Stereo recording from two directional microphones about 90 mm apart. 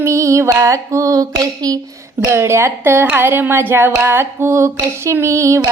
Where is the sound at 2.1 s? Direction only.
30° right (ahead or behind).